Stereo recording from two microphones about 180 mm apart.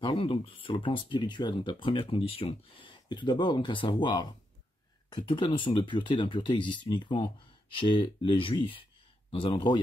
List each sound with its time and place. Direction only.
0.0 s speech: 25° left (ahead or behind)